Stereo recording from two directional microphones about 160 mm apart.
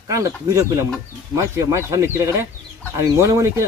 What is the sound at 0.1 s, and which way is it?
Speech, 20° right (ahead or behind).